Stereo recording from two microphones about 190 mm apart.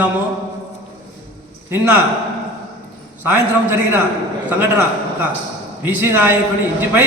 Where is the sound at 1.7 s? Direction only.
10° right (ahead or behind).